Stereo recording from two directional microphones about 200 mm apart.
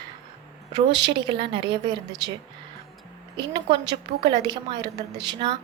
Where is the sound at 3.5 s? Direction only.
25° right (ahead or behind).